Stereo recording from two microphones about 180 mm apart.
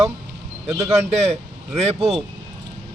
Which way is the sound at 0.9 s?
35° right (ahead or behind).